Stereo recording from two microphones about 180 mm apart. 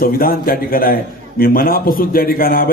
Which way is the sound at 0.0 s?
55° left (ahead or behind).